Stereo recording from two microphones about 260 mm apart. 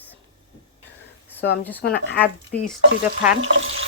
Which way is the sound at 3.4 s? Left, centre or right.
Right.